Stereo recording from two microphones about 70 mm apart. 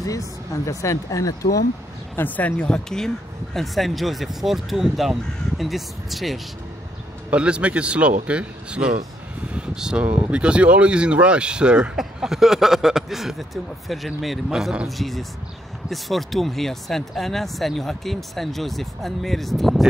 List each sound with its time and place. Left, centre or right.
0.0 s speech: left
2.1 s speech: left; by 6.4 s centre
7.2 s speech: centre
9.5 s a sound: centre
10.0 s speech: right
14.9 s speech: centre